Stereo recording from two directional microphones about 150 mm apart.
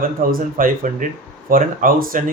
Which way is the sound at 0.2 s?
70° right (ahead or behind).